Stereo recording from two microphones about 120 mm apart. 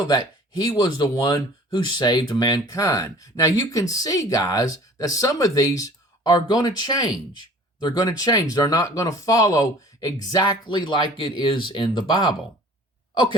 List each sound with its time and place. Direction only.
0.0 s speech: 35° left (ahead or behind)